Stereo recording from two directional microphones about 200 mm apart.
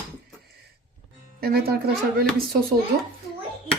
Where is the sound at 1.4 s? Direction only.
50° right (ahead or behind).